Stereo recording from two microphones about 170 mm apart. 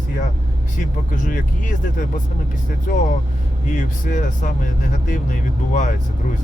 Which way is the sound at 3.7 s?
50° left (ahead or behind).